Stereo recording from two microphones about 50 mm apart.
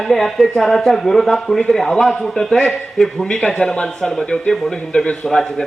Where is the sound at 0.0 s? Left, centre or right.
Centre.